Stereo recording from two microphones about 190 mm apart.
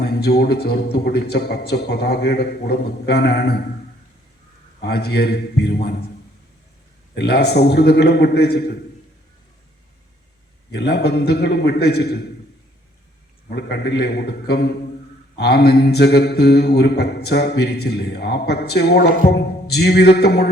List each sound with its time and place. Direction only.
0.0 s mantra: 55° left (ahead or behind)
4.8 s mantra: 55° left (ahead or behind)
7.2 s mantra: 60° left (ahead or behind)
10.7 s mantra: 60° left (ahead or behind)
13.6 s mantra: 60° left (ahead or behind)